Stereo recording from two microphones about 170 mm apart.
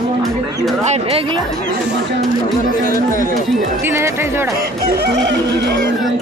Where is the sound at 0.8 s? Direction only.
40° right (ahead or behind).